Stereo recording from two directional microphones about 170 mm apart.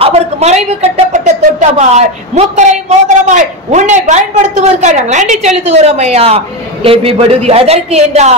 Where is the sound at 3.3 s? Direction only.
45° right (ahead or behind).